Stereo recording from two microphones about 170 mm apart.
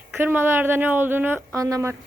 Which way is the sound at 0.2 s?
10° right (ahead or behind).